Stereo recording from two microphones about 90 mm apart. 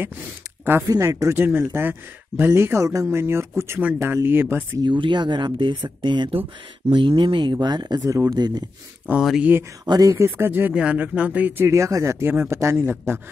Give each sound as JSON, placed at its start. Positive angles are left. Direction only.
{"t": 0.8, "sound": "speech", "side_deg": -40}
{"t": 1.3, "sound": "speech", "side_deg": -25}
{"t": 4.8, "sound": "speech", "side_deg": -60}
{"t": 7.6, "sound": "speech", "side_deg": -50}
{"t": 8.1, "sound": "speech", "side_deg": -35}
{"t": 8.4, "sound": "speech", "side_deg": -50}
{"t": 9.4, "sound": "speech", "side_deg": -25}
{"t": 9.8, "sound": "speech", "side_deg": -40}
{"t": 11.6, "sound": "speech", "side_deg": -35}